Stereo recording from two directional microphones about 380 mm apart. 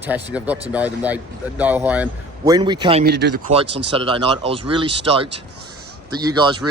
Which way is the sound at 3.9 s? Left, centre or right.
Centre.